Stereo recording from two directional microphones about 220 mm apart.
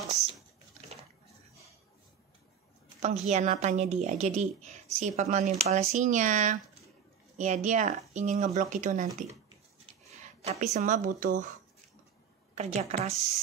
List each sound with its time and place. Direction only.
3.0 s a woman's voice: 35° right (ahead or behind)
10.2 s a sound: 30° right (ahead or behind)
10.8 s a woman's voice: 35° right (ahead or behind)
12.5 s speech: 30° right (ahead or behind)